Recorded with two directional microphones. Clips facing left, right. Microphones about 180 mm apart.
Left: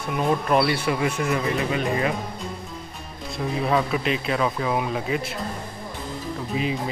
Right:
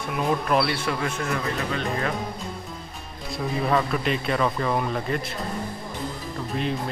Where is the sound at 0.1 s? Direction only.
Centre (ahead or behind).